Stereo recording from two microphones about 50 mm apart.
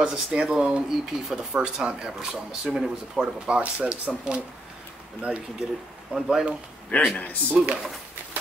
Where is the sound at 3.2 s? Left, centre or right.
Right.